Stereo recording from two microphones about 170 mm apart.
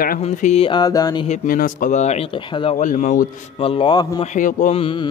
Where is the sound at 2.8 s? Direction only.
45° left (ahead or behind).